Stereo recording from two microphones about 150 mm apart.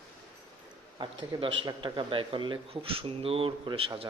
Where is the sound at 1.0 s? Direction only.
35° right (ahead or behind).